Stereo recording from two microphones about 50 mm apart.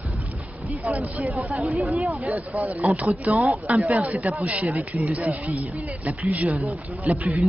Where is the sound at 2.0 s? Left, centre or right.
Right.